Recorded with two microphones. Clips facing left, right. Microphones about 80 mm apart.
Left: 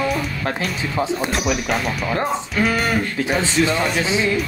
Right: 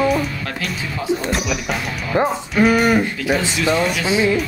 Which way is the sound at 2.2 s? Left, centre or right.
Centre.